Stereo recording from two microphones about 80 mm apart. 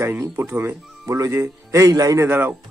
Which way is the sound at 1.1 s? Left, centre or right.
Right.